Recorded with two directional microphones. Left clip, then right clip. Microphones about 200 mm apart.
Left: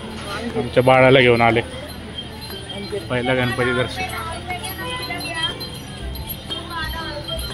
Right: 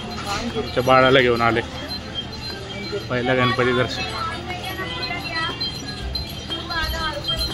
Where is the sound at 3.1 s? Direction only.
5° left (ahead or behind).